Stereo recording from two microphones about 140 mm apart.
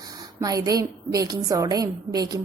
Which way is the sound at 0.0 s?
25° right (ahead or behind).